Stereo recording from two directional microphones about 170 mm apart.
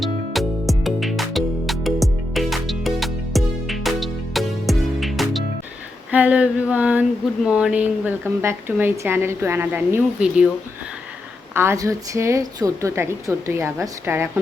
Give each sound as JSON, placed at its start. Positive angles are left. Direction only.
{"t": 0.0, "sound": "music", "side_deg": 0}
{"t": 6.1, "sound": "a woman's voice", "side_deg": -10}
{"t": 11.5, "sound": "a woman's voice", "side_deg": -15}